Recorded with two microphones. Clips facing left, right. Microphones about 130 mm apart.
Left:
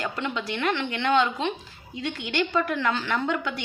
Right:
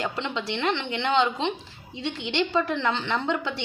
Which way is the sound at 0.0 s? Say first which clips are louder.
Even; 25° right (ahead or behind).